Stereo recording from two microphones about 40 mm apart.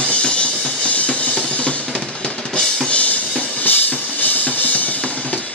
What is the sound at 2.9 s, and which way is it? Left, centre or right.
Drum kit, left.